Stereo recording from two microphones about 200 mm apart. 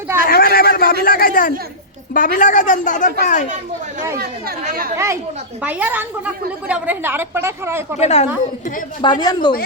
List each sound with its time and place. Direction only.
0.3 s a sound: 50° left (ahead or behind)
2.1 s a woman's voice: 40° left (ahead or behind)
4.6 s speech: 45° right (ahead or behind)
5.6 s a woman's voice: 10° right (ahead or behind)
7.9 s a woman's voice: 35° left (ahead or behind)
9.0 s a woman's voice: 20° left (ahead or behind)